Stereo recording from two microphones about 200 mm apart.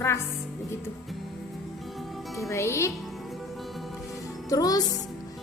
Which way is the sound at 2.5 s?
15° left (ahead or behind).